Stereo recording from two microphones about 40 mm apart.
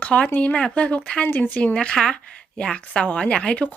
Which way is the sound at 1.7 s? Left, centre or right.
Left.